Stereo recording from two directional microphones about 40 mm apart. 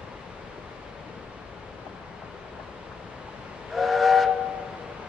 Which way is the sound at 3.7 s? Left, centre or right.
Centre.